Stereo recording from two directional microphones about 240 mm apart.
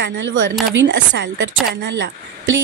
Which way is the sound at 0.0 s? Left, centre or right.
Right.